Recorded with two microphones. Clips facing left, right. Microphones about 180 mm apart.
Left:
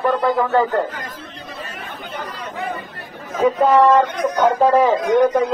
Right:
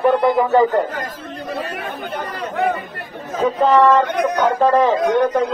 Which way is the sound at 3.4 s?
10° left (ahead or behind).